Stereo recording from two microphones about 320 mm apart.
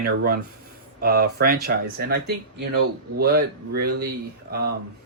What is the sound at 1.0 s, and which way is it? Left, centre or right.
Speech, right.